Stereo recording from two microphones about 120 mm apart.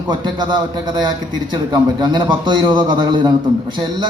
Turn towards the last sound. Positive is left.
turn(degrees=-40)  # may be behind; listen again after turning